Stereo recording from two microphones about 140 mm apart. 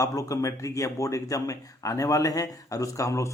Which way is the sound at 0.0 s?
25° left (ahead or behind).